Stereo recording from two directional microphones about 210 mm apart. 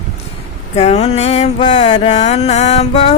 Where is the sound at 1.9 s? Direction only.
20° left (ahead or behind).